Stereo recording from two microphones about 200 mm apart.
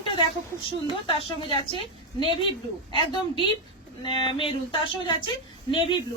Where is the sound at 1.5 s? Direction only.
25° left (ahead or behind).